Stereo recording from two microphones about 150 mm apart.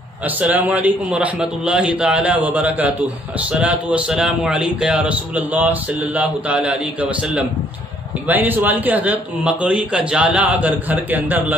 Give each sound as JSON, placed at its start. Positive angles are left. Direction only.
{"t": 0.2, "sound": "a man's voice", "side_deg": -10}